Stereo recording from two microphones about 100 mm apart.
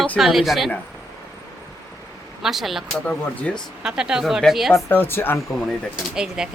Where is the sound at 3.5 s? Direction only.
10° left (ahead or behind).